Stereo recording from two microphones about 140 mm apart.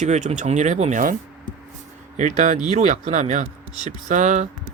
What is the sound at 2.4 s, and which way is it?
Speech, 60° right (ahead or behind).